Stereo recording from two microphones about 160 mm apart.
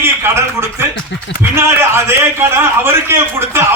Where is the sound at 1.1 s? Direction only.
90° left.